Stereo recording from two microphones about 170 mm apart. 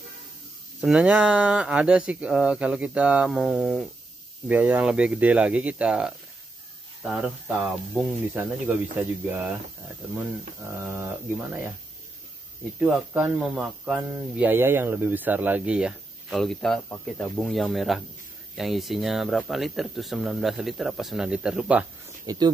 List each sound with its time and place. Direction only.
0.7 s speech: 5° right (ahead or behind)
10.0 s speech: 5° right (ahead or behind)
12.7 s speech: 10° right (ahead or behind)
22.2 s speech: 20° right (ahead or behind)